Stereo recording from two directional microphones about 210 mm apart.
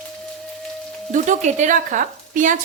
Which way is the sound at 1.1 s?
35° right (ahead or behind).